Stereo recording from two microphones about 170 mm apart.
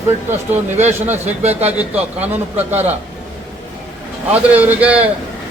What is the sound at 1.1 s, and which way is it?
Speech, 40° right (ahead or behind).